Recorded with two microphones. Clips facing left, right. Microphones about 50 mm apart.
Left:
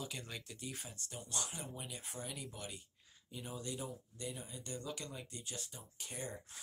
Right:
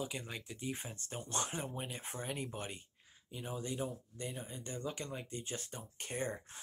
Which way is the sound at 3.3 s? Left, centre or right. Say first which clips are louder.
Right 4 dB; right.